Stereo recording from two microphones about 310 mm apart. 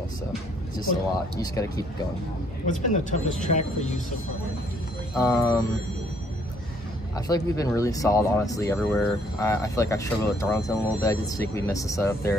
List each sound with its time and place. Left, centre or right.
1.4 s speech: centre
2.6 s speech: left
5.1 s speech: centre
7.2 s speech: centre